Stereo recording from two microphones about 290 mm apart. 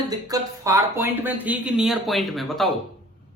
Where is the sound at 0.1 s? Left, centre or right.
Centre.